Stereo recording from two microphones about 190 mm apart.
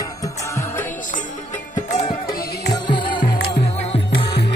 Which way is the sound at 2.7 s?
25° left (ahead or behind).